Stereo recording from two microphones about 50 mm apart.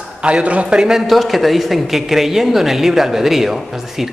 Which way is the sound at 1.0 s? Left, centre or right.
Centre.